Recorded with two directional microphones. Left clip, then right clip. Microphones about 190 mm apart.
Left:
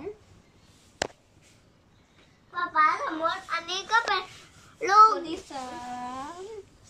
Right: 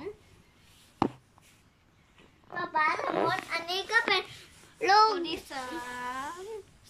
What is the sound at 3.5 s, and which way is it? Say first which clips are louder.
Speech: left 2 dB; 25° right (ahead or behind).